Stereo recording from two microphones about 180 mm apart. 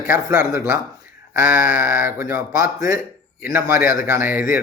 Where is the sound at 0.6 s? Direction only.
15° right (ahead or behind).